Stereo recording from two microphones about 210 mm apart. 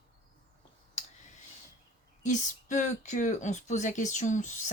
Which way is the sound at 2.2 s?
35° left (ahead or behind).